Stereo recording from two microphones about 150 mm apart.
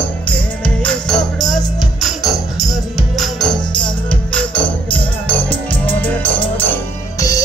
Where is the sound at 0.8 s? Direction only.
5° left (ahead or behind).